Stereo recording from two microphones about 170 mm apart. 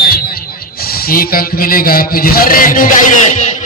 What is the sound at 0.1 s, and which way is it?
Speech, 60° left (ahead or behind).